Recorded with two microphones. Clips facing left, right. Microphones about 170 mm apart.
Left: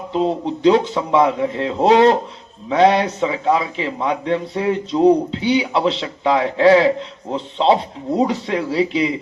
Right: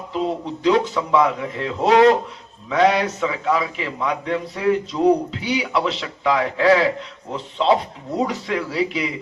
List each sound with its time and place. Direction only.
0.1 s a man's voice: 30° left (ahead or behind)